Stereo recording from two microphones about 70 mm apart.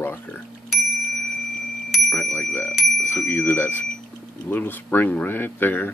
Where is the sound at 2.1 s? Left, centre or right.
Left.